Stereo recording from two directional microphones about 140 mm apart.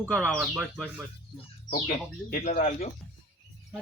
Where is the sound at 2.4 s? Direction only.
60° left (ahead or behind).